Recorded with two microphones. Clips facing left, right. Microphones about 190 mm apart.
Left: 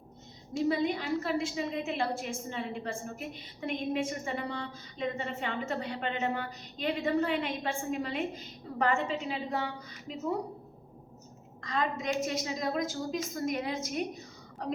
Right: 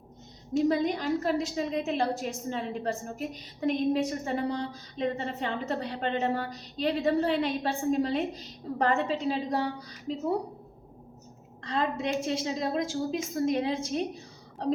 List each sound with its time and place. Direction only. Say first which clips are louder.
0.5 s a woman's voice: right 3 dB; 40° right (ahead or behind)
11.6 s a woman's voice: right 3 dB; 30° right (ahead or behind)